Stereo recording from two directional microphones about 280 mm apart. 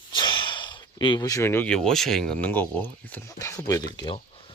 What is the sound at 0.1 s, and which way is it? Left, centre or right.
Speech, centre.